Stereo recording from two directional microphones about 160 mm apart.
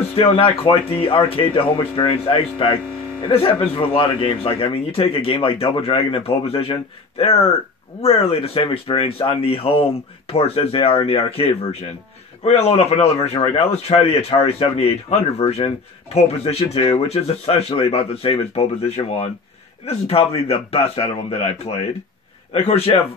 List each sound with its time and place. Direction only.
0.1 s a man's voice: 35° left (ahead or behind)